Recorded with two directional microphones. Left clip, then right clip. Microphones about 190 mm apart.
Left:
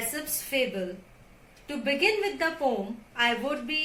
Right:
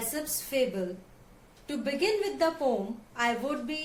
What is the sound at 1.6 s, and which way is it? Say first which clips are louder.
A woman's voice: left 4 dB; 25° right (ahead or behind).